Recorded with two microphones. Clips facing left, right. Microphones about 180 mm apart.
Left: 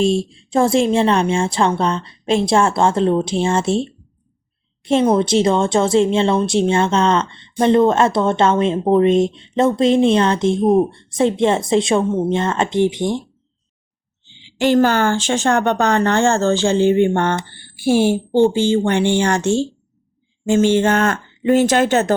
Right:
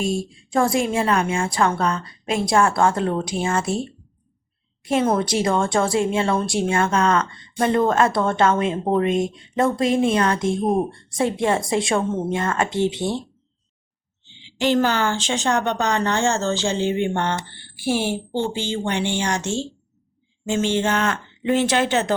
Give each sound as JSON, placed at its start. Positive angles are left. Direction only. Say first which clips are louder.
{"t": 0.0, "sound": "speech", "louder": "left 7 dB", "side_deg": 25}
{"t": 14.6, "sound": "speech", "louder": "left 5 dB", "side_deg": 50}